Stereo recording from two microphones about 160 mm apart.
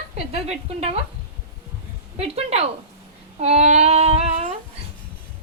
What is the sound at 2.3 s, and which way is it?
A woman's voice, 40° right (ahead or behind).